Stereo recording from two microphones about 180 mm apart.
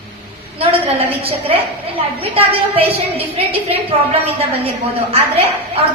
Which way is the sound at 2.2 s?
30° right (ahead or behind).